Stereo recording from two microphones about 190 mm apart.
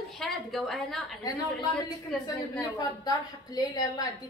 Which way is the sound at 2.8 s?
20° left (ahead or behind).